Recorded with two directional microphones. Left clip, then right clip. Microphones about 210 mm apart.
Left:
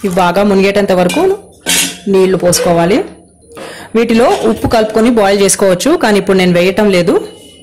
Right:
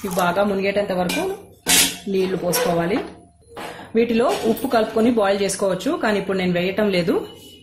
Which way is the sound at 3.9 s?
30° left (ahead or behind).